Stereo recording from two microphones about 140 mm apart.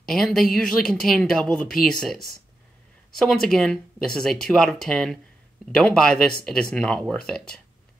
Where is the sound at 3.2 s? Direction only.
5° left (ahead or behind).